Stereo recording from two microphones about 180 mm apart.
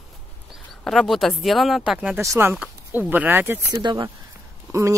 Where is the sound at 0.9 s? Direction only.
Centre (ahead or behind).